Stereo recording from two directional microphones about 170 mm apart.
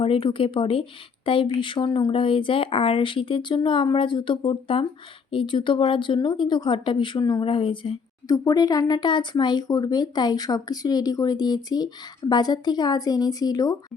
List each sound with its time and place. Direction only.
0.0 s speech: 30° left (ahead or behind)